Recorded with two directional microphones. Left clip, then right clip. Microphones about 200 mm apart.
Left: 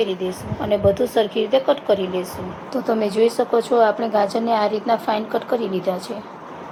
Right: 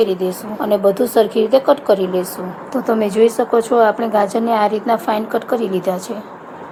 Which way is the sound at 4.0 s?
50° right (ahead or behind).